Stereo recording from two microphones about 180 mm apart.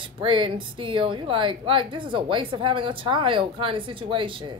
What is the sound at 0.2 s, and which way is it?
Speech, 30° right (ahead or behind).